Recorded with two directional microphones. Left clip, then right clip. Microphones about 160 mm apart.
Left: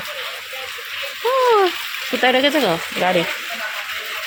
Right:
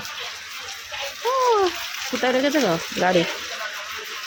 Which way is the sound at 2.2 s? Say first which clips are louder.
Left 5 dB; centre (ahead or behind).